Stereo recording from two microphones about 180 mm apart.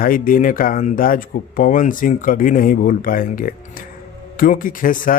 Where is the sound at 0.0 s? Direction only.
50° left (ahead or behind).